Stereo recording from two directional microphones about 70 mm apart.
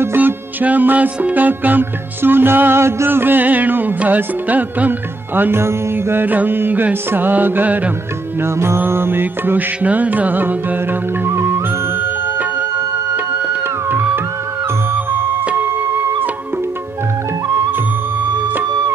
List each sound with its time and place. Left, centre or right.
0.0 s music: right
8.4 s music: right
13.8 s music: right